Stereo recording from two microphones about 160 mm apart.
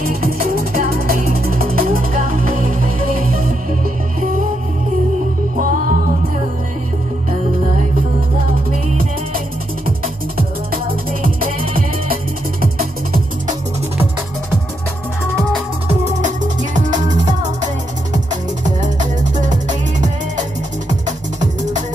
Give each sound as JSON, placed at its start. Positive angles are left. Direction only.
{"t": 0.2, "sound": "music", "side_deg": -65}
{"t": 4.2, "sound": "music", "side_deg": -55}
{"t": 5.6, "sound": "music", "side_deg": -60}
{"t": 15.9, "sound": "music", "side_deg": -45}